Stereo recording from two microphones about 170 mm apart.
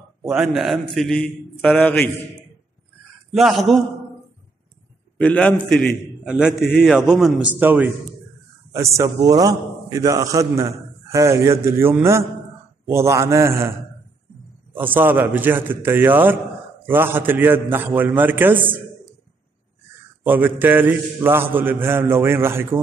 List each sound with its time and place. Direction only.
0.3 s a man's voice: centre (ahead or behind)
3.3 s a man's voice: centre (ahead or behind)
5.2 s a man's voice: 5° left (ahead or behind)
6.2 s a man's voice: 5° right (ahead or behind)
20.2 s a man's voice: 10° right (ahead or behind)